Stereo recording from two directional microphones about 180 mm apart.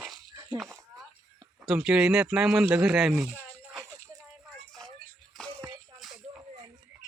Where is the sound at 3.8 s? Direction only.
20° right (ahead or behind).